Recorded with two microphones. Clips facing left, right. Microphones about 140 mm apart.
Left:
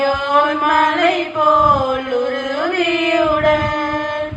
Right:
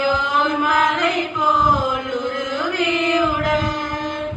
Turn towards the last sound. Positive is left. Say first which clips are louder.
# left 5 dB
turn(degrees=55)  # may be behind; listen again after turning